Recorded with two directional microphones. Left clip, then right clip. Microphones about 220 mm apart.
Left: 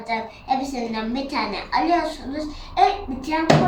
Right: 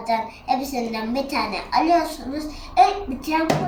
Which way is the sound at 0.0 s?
10° right (ahead or behind).